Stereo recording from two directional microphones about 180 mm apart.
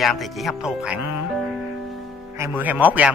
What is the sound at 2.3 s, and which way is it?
Speech, 15° right (ahead or behind).